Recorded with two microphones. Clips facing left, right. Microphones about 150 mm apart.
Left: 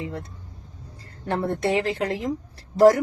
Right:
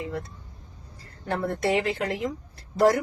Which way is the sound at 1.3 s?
30° left (ahead or behind).